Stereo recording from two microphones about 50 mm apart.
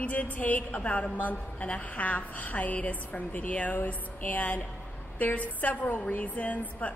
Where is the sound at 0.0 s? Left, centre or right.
Left.